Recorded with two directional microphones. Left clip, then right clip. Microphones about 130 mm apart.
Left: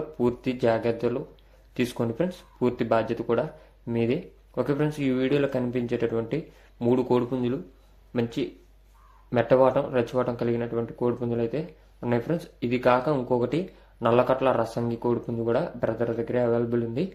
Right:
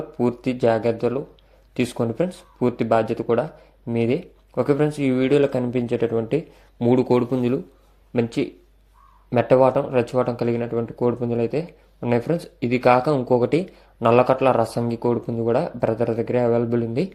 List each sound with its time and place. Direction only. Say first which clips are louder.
0.2 s speech: right 4 dB; 25° right (ahead or behind)
6.2 s speech: right 7 dB; 45° right (ahead or behind)